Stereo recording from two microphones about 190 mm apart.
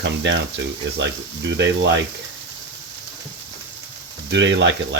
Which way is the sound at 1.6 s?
65° right (ahead or behind).